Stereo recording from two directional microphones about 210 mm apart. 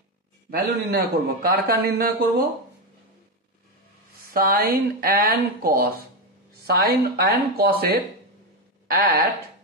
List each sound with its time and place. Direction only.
0.5 s a man's voice: 50° right (ahead or behind)
4.3 s a man's voice: 45° right (ahead or behind)